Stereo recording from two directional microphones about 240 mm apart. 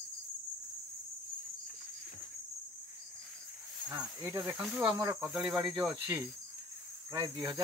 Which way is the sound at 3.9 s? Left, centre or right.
Centre.